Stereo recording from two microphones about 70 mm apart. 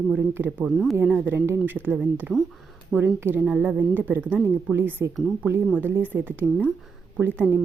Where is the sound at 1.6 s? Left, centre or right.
Right.